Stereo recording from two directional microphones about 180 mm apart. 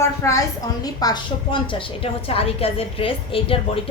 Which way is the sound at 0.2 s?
15° left (ahead or behind).